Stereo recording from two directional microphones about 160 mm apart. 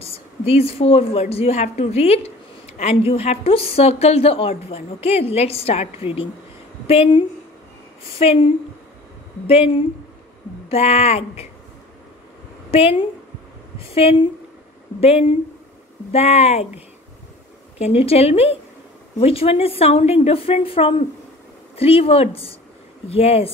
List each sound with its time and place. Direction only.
0.0 s a woman's voice: 40° left (ahead or behind)
9.5 s a woman's voice: 40° left (ahead or behind)
12.7 s a woman's voice: 35° left (ahead or behind)
13.9 s a woman's voice: 35° left (ahead or behind)
17.7 s a woman's voice: 40° left (ahead or behind)